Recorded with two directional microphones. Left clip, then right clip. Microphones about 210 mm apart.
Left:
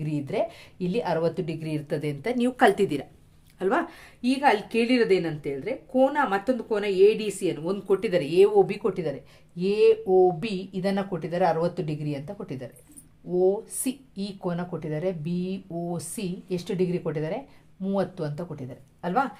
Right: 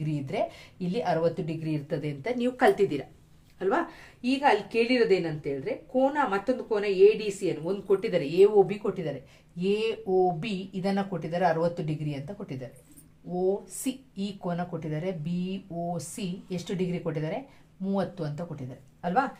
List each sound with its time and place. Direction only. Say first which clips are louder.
0.0 s a woman's voice: left 2 dB; 35° left (ahead or behind)